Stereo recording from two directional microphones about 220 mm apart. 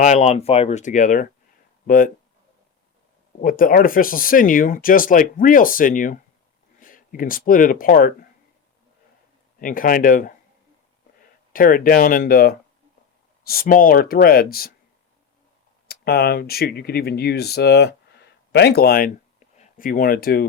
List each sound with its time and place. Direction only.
0.0 s speech: 30° left (ahead or behind)
3.4 s speech: 40° left (ahead or behind)
9.6 s speech: 40° left (ahead or behind)
15.9 s speech: 45° left (ahead or behind)